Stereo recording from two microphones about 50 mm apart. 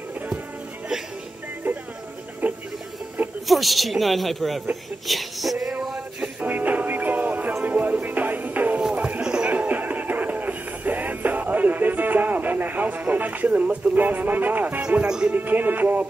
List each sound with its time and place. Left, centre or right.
2.4 s music: right
3.4 s speech: centre
5.0 s child singing: centre
5.9 s music: centre
6.4 s music: right
8.9 s a sound: right
9.2 s music: centre
9.5 s music: right
14.8 s speech: right
15.0 s speech: centre
15.3 s music: right